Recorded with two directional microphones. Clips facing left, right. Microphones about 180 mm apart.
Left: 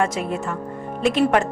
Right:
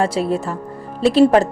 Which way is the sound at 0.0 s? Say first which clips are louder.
Right 4 dB; 35° right (ahead or behind).